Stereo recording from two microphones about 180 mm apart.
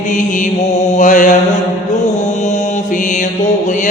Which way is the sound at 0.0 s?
45° left (ahead or behind).